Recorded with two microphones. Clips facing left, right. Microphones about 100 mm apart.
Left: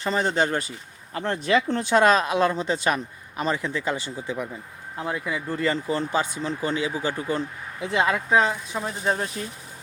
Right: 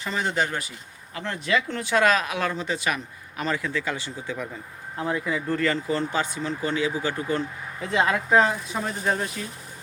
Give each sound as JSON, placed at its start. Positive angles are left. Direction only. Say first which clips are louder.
{"t": 0.0, "sound": "speech", "louder": "left 3 dB", "side_deg": 35}
{"t": 7.8, "sound": "speech", "louder": "even", "side_deg": 5}
{"t": 9.4, "sound": "speech", "louder": "left 2 dB", "side_deg": 35}